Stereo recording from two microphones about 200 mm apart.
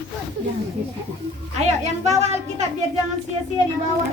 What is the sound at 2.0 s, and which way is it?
Speech, 35° right (ahead or behind).